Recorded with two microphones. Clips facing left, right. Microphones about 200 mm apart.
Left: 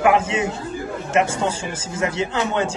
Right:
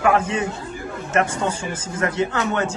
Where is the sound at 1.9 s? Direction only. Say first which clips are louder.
Even; 25° left (ahead or behind).